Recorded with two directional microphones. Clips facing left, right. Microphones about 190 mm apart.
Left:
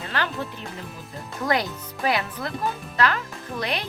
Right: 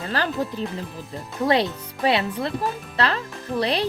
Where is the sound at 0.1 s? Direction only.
35° right (ahead or behind).